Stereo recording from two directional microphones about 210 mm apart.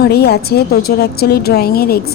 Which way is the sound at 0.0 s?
50° left (ahead or behind).